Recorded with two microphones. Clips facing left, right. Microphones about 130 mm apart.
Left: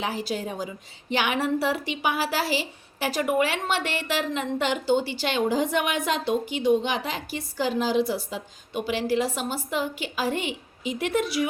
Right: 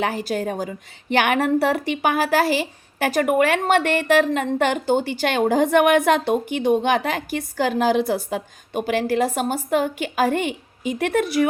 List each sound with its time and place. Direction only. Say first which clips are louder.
0.0 s a woman's voice: right 6 dB; 50° right (ahead or behind)